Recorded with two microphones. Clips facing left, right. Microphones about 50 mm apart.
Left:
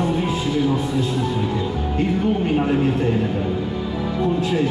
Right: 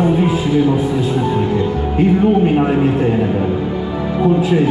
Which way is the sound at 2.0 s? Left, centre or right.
Centre.